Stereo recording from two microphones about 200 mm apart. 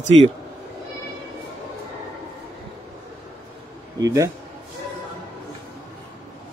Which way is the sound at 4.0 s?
15° right (ahead or behind).